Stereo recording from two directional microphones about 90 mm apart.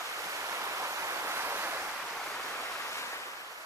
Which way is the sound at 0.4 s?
35° right (ahead or behind).